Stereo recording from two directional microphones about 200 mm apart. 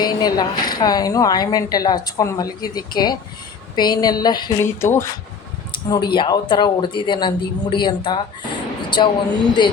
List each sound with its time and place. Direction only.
0.0 s a woman's voice: 20° left (ahead or behind)
5.9 s a woman's voice: 20° left (ahead or behind)